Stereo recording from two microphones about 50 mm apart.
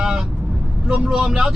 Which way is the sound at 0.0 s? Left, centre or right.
Centre.